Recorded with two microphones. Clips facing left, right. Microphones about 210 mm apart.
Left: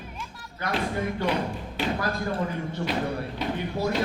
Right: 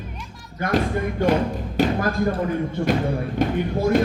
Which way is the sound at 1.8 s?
45° right (ahead or behind).